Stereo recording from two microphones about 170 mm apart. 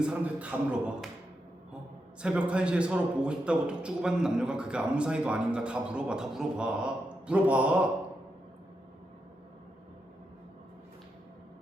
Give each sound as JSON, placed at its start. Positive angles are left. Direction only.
{"t": 0.0, "sound": "a man's voice", "side_deg": -10}
{"t": 2.2, "sound": "a man's voice", "side_deg": -5}